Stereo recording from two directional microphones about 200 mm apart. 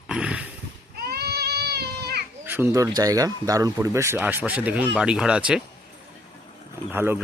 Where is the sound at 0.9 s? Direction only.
50° right (ahead or behind).